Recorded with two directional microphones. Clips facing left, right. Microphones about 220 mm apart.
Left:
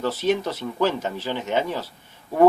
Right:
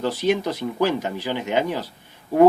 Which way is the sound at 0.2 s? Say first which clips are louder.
Right 1 dB; 15° right (ahead or behind).